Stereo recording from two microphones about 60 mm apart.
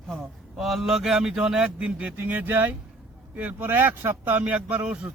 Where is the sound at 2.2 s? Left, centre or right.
Right.